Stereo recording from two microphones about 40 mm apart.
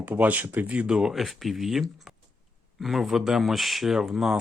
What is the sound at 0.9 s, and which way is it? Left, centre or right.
Speech, right.